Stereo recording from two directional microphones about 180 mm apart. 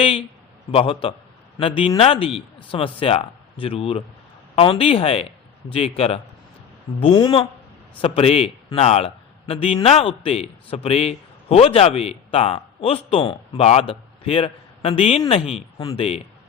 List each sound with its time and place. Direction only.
0.0 s a man's voice: 30° left (ahead or behind)